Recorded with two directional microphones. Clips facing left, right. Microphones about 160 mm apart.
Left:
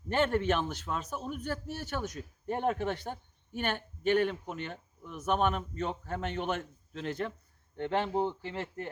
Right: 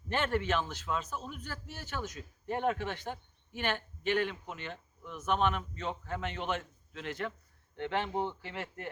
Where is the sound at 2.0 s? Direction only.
35° left (ahead or behind).